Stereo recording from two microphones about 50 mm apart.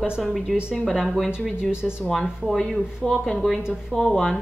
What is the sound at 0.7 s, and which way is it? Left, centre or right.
Speech, centre.